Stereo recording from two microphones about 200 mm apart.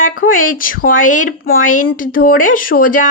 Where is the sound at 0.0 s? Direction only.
40° left (ahead or behind).